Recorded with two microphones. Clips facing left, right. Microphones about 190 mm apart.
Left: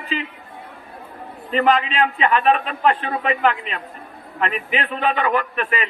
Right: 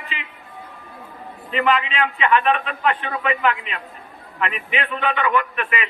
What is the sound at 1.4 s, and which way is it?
A man's voice, 40° left (ahead or behind).